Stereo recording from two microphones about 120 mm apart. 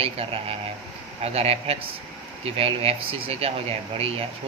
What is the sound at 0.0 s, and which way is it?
Speech, 55° right (ahead or behind).